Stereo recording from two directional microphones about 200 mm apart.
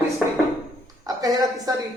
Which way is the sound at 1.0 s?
20° right (ahead or behind).